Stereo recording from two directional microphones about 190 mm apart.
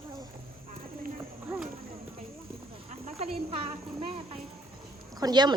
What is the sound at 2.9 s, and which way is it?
Insect, 30° right (ahead or behind).